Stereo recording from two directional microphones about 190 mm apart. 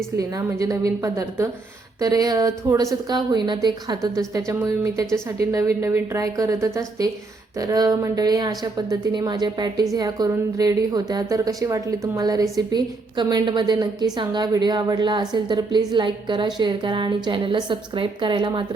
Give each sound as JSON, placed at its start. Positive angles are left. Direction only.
{"t": 0.2, "sound": "a woman's voice", "side_deg": -15}